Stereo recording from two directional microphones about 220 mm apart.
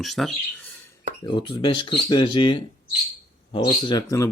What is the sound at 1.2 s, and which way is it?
Speech, 20° left (ahead or behind).